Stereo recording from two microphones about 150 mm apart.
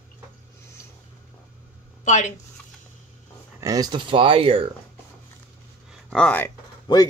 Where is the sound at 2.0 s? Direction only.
55° left (ahead or behind).